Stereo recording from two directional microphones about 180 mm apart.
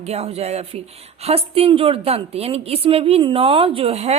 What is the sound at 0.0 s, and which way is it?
A woman's voice, 35° right (ahead or behind).